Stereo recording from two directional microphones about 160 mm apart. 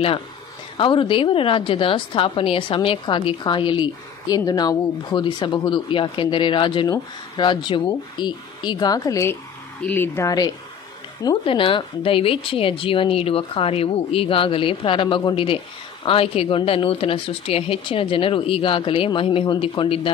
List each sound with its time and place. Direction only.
0.7 s a woman's voice: 30° left (ahead or behind)
11.2 s a woman's voice: 35° left (ahead or behind)